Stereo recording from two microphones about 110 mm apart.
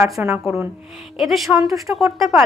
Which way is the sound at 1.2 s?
Centre (ahead or behind).